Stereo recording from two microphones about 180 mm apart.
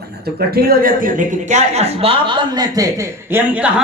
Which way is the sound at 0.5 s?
55° right (ahead or behind).